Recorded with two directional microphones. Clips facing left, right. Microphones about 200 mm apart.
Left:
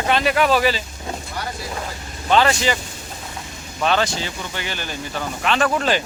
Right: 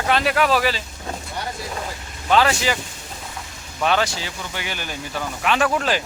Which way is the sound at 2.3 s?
5° right (ahead or behind).